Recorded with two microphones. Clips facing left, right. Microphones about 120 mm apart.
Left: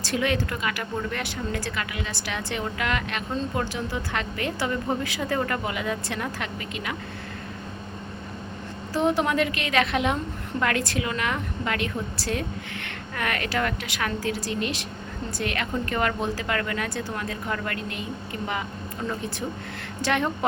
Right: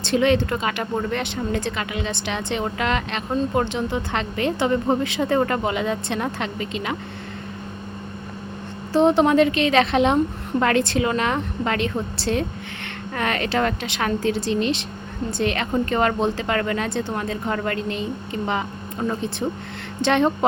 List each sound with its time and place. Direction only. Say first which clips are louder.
0.0 s a woman's voice: right 7 dB; 25° right (ahead or behind)
8.9 s a woman's voice: right 7 dB; 25° right (ahead or behind)
20.0 s a woman's voice: right 6 dB; 25° right (ahead or behind)